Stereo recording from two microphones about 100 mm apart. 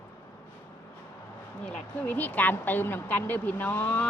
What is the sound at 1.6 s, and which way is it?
Speech, 15° left (ahead or behind).